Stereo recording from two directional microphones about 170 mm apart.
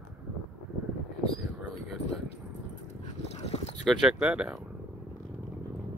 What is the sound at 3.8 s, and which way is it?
Speech, 5° right (ahead or behind).